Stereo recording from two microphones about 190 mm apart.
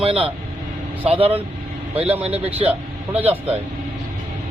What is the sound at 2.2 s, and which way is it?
Speech, 30° right (ahead or behind).